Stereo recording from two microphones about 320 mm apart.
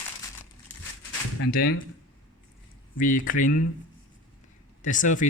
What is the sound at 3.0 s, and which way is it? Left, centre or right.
Speech, left.